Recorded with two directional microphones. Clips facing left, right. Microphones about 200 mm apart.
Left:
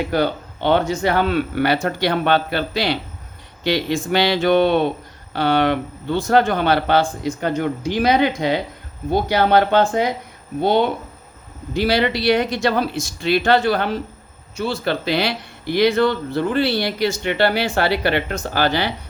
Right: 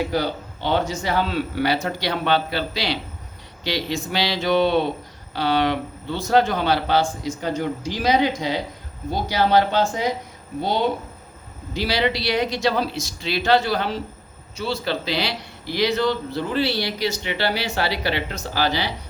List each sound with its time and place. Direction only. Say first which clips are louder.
0.1 s speech: left 4 dB; 60° left (ahead or behind)